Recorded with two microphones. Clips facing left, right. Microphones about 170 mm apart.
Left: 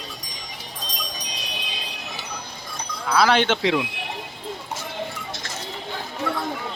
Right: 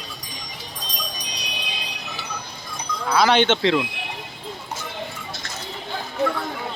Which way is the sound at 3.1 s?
Centre (ahead or behind).